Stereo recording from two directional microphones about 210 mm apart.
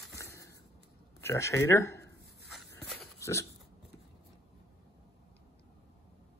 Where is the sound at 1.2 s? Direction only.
15° left (ahead or behind).